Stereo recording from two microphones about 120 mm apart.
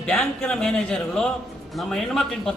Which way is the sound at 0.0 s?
10° left (ahead or behind).